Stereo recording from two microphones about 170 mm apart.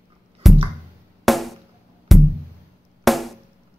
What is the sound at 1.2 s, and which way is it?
Music, centre (ahead or behind).